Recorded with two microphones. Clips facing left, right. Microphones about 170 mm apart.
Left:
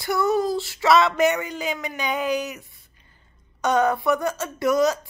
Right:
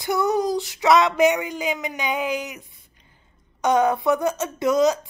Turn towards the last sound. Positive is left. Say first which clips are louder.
# right 1 dB
turn(degrees=-20)  # may be behind; listen again after turning